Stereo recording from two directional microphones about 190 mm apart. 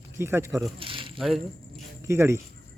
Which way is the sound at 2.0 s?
15° right (ahead or behind).